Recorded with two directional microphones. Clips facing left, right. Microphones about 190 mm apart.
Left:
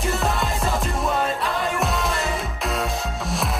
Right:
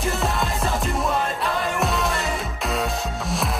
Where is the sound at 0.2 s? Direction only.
Centre (ahead or behind).